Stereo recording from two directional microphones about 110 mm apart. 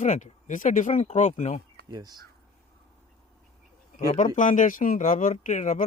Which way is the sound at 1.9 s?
40° right (ahead or behind).